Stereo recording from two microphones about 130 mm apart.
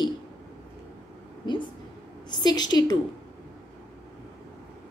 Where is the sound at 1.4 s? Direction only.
35° left (ahead or behind).